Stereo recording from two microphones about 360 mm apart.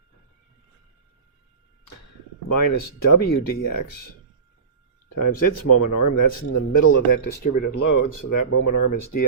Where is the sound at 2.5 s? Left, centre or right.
Left.